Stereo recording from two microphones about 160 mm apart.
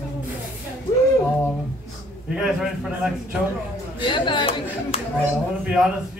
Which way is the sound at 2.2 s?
5° right (ahead or behind).